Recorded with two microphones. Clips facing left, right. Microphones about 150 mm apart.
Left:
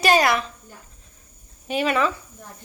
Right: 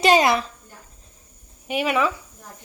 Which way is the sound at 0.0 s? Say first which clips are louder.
Right 2 dB; 20° right (ahead or behind).